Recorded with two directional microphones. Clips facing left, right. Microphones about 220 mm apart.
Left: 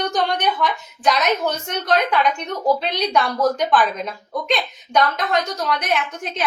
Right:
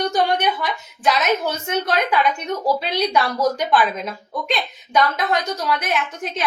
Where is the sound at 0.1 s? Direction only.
10° right (ahead or behind).